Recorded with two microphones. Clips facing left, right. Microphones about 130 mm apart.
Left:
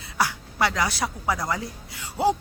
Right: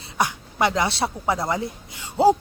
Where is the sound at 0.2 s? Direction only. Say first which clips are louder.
Right 2 dB; 20° right (ahead or behind).